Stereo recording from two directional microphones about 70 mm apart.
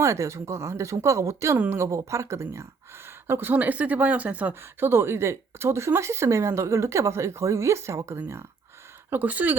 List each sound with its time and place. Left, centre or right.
0.0 s speech: right
4.6 s speech: right
9.0 s speech: right